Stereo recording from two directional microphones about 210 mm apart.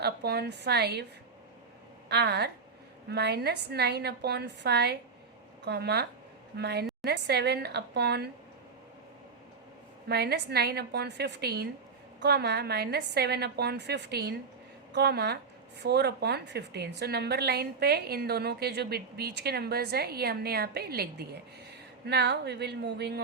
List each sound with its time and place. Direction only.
0.0 s a woman's voice: 50° right (ahead or behind)
2.0 s a woman's voice: 55° right (ahead or behind)
10.1 s a woman's voice: 50° right (ahead or behind)